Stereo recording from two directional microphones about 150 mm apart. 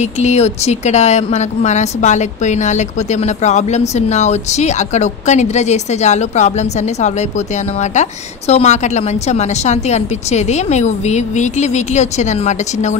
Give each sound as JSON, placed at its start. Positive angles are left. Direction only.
{"t": 0.0, "sound": "a woman's voice", "side_deg": 50}